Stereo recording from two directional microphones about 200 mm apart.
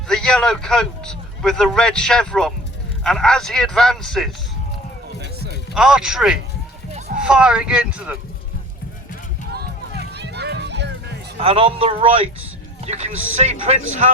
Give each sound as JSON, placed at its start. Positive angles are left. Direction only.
{"t": 0.1, "sound": "a man's voice", "side_deg": 5}
{"t": 5.2, "sound": "a sound", "side_deg": -55}
{"t": 5.7, "sound": "a man's voice", "side_deg": -5}
{"t": 10.1, "sound": "music", "side_deg": -55}
{"t": 11.3, "sound": "speech", "side_deg": -25}